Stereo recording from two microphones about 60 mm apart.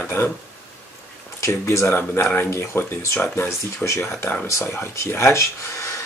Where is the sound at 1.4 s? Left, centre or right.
Left.